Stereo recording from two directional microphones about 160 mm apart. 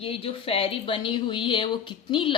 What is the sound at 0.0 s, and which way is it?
A woman's voice, 35° left (ahead or behind).